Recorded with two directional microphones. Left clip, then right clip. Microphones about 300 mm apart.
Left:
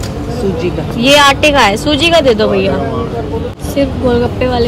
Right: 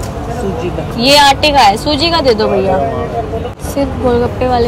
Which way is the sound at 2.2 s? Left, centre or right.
Centre.